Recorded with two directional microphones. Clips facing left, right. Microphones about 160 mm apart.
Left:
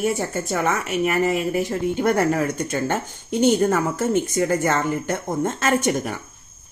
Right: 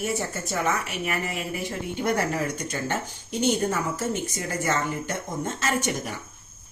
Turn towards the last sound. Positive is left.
turn(degrees=50)  # may be behind; listen again after turning